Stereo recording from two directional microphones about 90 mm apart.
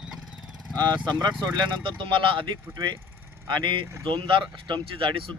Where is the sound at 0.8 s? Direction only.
50° right (ahead or behind); by 2.4 s 70° right (ahead or behind).